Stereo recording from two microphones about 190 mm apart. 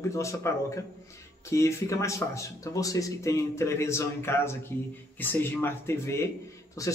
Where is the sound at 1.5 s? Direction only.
15° left (ahead or behind).